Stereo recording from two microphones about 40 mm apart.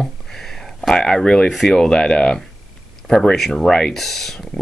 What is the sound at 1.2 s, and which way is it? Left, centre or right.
Speech, centre.